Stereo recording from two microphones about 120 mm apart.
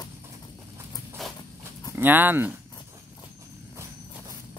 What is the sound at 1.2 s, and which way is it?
Dog, centre (ahead or behind).